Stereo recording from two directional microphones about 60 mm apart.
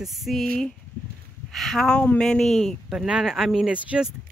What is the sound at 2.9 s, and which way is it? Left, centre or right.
Speech, centre.